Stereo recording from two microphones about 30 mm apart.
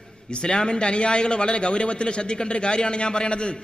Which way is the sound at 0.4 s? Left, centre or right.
Left.